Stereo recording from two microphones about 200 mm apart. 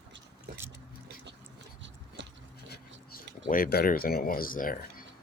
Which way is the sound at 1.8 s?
60° right (ahead or behind).